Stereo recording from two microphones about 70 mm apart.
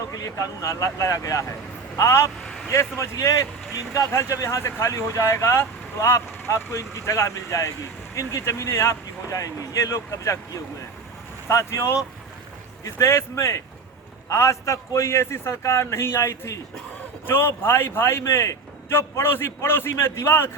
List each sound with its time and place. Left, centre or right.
0.1 s speech: left
11.4 s a man's voice: left